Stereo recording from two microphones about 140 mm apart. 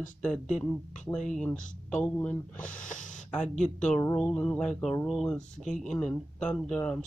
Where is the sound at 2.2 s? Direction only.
10° left (ahead or behind).